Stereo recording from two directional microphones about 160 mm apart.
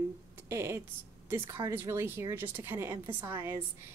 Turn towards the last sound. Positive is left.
turn(degrees=-15)  # may be behind; listen again after turning